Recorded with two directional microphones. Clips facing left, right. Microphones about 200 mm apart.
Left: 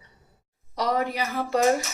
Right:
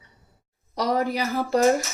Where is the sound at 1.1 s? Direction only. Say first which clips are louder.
Right 3 dB; 40° right (ahead or behind).